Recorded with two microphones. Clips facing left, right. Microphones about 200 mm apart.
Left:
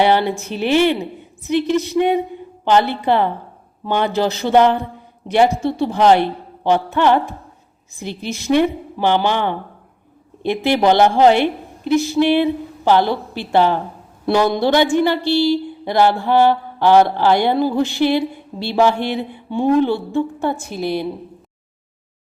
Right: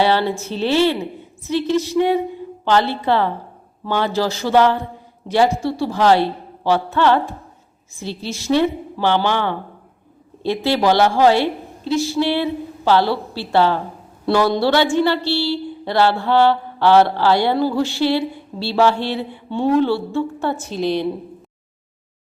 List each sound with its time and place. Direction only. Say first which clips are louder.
0.0 s a woman's voice: left 2 dB; 15° left (ahead or behind)